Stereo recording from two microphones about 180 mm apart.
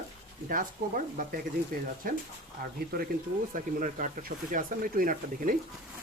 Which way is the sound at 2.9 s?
60° right (ahead or behind).